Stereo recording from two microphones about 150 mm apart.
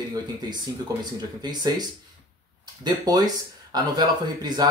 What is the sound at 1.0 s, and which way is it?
Speech, 30° right (ahead or behind).